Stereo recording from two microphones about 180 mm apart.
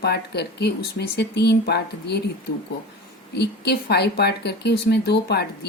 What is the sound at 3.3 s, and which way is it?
Speech, 65° left (ahead or behind).